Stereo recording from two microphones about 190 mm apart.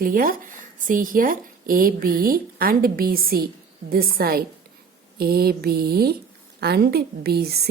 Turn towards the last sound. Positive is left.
turn(degrees=-55)  # may be behind; listen again after turning